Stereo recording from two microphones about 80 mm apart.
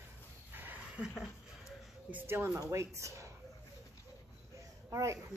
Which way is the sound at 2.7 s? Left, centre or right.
Right.